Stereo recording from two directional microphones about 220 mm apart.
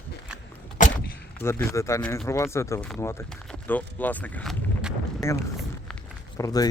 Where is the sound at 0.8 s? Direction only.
35° left (ahead or behind).